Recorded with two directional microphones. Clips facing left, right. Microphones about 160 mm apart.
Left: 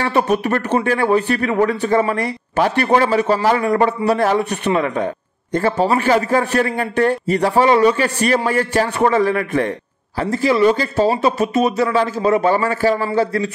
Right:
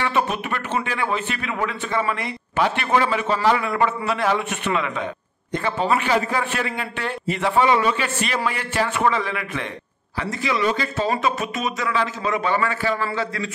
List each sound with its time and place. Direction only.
0.0 s a man's voice: 40° left (ahead or behind)